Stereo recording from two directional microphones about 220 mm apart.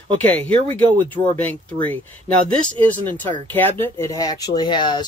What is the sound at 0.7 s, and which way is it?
Speech, 10° left (ahead or behind).